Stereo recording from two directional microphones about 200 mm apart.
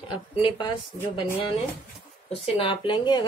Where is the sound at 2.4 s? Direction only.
30° left (ahead or behind).